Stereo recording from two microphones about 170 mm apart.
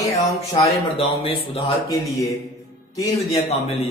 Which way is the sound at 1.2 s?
35° left (ahead or behind).